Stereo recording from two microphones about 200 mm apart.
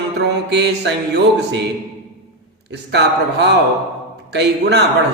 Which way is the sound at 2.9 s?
60° right (ahead or behind).